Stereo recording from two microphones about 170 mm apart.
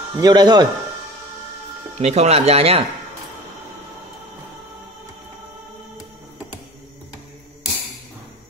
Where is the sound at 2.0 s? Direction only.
40° right (ahead or behind).